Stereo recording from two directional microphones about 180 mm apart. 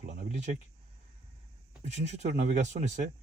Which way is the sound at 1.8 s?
40° right (ahead or behind).